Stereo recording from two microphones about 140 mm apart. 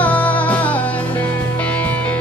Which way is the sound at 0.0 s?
10° left (ahead or behind).